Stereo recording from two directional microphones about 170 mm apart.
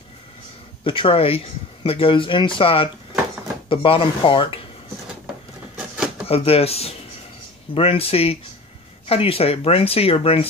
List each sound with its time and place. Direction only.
0.8 s speech: 30° left (ahead or behind)
6.2 s speech: 35° left (ahead or behind)